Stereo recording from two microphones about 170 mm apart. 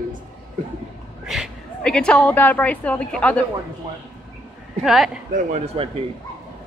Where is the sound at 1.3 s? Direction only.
Centre (ahead or behind).